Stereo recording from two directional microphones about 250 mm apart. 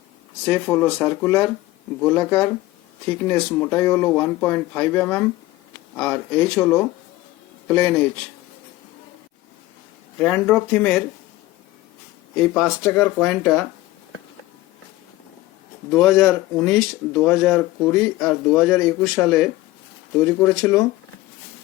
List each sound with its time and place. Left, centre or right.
0.4 s speech: centre
10.2 s speech: centre
12.4 s speech: centre
15.9 s speech: centre